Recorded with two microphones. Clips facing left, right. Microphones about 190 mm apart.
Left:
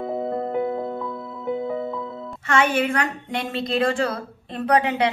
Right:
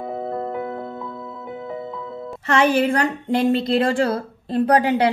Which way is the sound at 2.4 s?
35° right (ahead or behind).